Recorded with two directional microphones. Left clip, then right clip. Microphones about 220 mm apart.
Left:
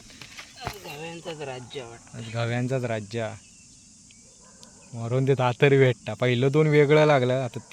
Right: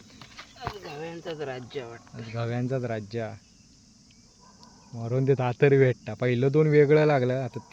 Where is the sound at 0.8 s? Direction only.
5° right (ahead or behind).